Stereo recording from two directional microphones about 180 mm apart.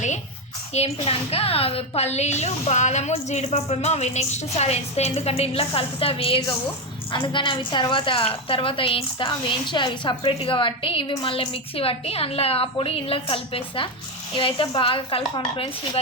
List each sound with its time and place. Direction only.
0.7 s a woman's voice: 35° left (ahead or behind)